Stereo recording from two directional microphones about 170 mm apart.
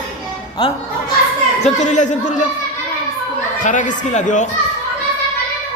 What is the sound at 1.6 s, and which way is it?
Speech, 45° left (ahead or behind).